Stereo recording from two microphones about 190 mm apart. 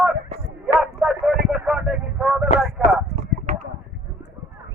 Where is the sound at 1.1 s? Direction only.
5° right (ahead or behind).